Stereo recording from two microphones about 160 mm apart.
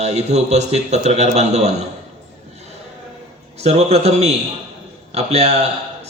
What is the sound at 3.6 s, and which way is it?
Speech, 40° right (ahead or behind).